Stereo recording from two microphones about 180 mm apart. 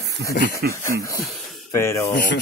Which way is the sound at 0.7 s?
15° left (ahead or behind).